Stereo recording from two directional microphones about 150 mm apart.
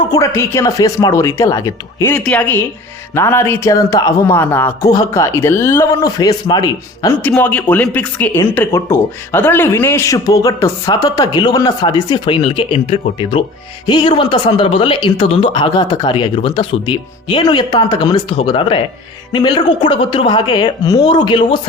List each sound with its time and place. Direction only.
0.1 s speech: 20° left (ahead or behind)
2.1 s speech: 10° left (ahead or behind); by 7.1 s 25° left (ahead or behind)
7.2 s speech: 10° left (ahead or behind); by 21.6 s 30° left (ahead or behind)